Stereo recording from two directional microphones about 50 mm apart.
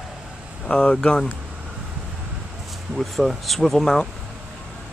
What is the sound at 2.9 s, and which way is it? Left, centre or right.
Speech, centre.